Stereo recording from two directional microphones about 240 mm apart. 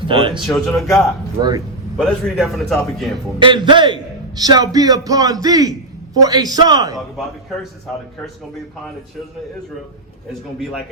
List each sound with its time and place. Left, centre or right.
0.1 s speech: centre
0.4 s a man's voice: centre
1.4 s a man's voice: centre
2.0 s a man's voice: centre
3.3 s a man's voice: centre